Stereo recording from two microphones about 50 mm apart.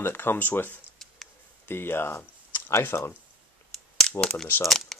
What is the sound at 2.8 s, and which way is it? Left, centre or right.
Speech, left.